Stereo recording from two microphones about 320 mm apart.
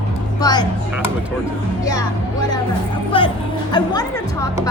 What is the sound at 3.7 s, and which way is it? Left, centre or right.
Speech, centre.